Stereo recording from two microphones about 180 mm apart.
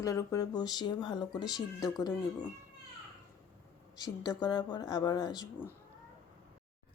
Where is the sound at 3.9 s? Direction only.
20° left (ahead or behind).